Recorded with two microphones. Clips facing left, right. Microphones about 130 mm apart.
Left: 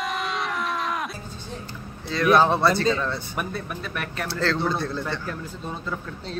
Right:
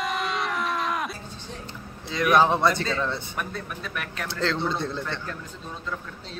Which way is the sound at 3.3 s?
5° left (ahead or behind).